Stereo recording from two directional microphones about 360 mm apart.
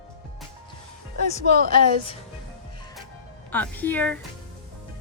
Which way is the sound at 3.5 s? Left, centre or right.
Centre.